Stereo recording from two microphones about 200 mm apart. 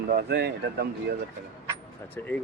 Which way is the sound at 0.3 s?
55° right (ahead or behind).